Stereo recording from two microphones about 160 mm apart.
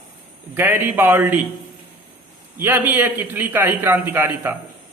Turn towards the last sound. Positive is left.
turn(degrees=-15)  # may be behind; listen again after turning